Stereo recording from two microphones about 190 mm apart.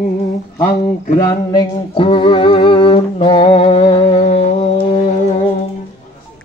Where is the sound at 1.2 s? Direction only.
20° left (ahead or behind).